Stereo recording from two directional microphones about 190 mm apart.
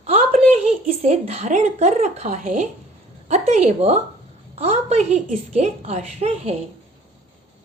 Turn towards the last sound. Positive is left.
turn(degrees=-35)  # may be behind; listen again after turning